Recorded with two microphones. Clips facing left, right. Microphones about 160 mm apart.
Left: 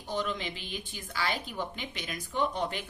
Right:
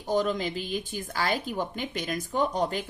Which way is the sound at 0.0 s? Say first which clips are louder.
Right 7 dB; 45° right (ahead or behind).